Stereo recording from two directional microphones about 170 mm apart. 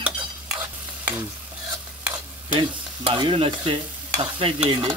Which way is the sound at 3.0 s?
30° right (ahead or behind).